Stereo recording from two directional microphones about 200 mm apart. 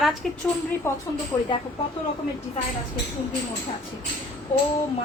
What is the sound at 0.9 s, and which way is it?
Speech, 10° left (ahead or behind).